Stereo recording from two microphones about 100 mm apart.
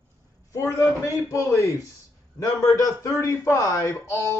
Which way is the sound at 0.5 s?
35° left (ahead or behind).